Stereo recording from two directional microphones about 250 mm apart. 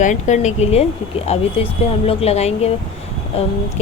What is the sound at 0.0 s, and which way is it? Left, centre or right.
Speech, left.